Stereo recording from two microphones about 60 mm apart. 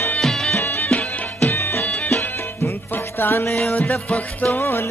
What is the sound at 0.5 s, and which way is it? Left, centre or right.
Music, left.